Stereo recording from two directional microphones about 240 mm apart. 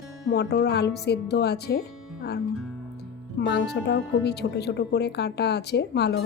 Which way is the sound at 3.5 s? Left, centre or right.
Left.